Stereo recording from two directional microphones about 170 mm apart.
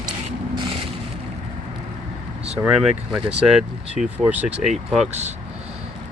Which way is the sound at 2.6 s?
5° right (ahead or behind).